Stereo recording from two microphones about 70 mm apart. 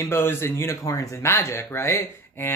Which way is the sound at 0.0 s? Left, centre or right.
Left.